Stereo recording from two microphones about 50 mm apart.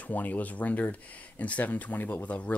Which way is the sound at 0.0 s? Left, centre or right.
Left.